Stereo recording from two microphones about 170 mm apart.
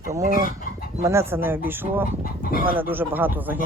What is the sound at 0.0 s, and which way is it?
Speech, 20° right (ahead or behind).